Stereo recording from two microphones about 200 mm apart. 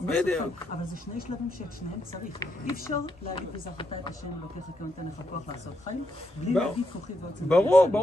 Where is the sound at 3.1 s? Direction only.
25° left (ahead or behind).